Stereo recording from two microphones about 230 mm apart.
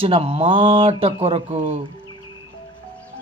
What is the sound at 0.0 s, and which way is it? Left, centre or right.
Speech, right.